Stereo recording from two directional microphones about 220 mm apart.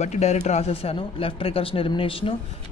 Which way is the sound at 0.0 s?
30° left (ahead or behind).